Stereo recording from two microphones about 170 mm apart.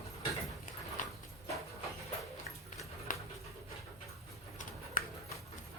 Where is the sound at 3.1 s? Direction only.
55° left (ahead or behind).